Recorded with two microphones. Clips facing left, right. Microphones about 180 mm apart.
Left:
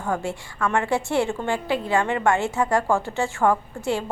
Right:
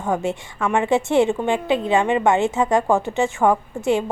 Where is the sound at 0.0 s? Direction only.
20° right (ahead or behind).